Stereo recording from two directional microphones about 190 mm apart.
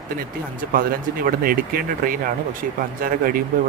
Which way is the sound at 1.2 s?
50° right (ahead or behind).